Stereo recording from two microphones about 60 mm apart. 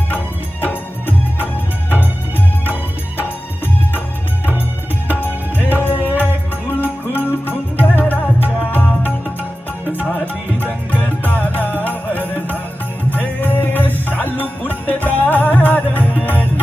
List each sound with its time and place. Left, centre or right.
0.6 s music: left
5.6 s music: left
10.6 s music: left